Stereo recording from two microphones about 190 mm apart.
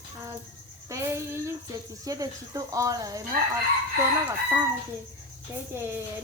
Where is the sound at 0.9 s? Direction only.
15° right (ahead or behind).